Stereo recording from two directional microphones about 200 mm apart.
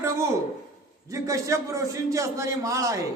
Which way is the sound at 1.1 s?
15° right (ahead or behind).